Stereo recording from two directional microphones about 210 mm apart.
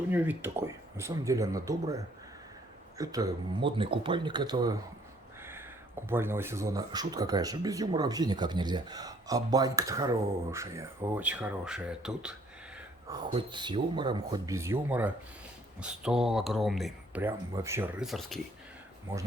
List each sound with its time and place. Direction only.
0.1 s speech: 10° right (ahead or behind)
3.0 s speech: 15° right (ahead or behind)
5.4 s a sound: 10° right (ahead or behind)
6.1 s speech: 10° right (ahead or behind)
13.1 s speech: 20° right (ahead or behind)
18.0 s speech: centre (ahead or behind)